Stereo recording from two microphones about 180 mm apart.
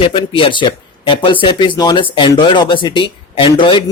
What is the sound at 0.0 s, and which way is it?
Speech, 30° left (ahead or behind).